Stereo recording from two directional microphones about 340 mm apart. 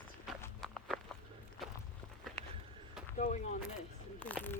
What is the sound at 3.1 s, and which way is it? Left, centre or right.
Speech, left.